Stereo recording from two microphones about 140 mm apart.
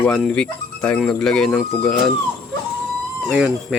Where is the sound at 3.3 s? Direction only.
10° right (ahead or behind).